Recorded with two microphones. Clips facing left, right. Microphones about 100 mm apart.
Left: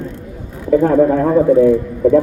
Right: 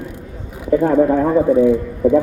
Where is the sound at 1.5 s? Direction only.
15° right (ahead or behind).